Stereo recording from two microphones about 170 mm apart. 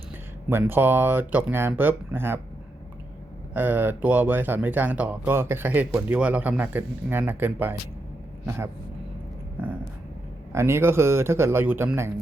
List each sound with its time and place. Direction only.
0.5 s speech: 10° right (ahead or behind)
3.5 s speech: 10° right (ahead or behind)
10.5 s speech: 15° right (ahead or behind)